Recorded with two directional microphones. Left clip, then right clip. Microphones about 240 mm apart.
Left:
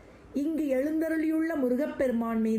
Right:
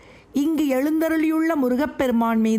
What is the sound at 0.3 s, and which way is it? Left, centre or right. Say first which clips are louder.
Speech: right 7 dB; right.